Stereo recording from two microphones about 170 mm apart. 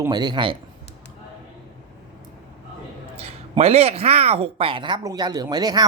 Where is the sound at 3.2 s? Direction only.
35° right (ahead or behind).